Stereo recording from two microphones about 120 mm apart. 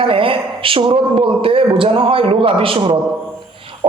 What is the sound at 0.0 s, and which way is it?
A man's voice, 50° right (ahead or behind).